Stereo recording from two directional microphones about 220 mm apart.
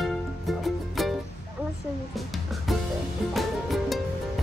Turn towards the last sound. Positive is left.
turn(degrees=0)  # may be behind; listen again after turning